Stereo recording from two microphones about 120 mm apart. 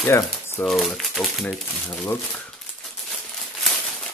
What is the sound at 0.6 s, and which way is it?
Speech, centre (ahead or behind).